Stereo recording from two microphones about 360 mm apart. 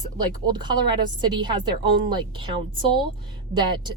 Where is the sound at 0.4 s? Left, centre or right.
Centre.